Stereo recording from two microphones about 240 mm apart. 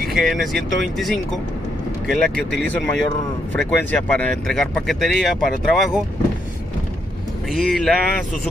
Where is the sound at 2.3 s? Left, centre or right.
Centre.